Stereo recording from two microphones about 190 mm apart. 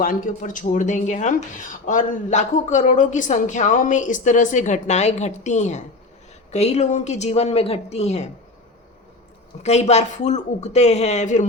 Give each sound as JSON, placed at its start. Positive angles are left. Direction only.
{"t": 0.0, "sound": "speech", "side_deg": 45}
{"t": 9.6, "sound": "speech", "side_deg": 35}